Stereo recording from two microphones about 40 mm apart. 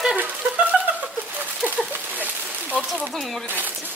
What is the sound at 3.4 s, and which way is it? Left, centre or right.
Speech, right.